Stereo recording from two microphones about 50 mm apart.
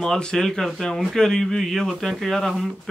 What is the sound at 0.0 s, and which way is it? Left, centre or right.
Speech, centre.